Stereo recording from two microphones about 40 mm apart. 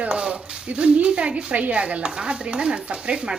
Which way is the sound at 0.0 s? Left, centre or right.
Right.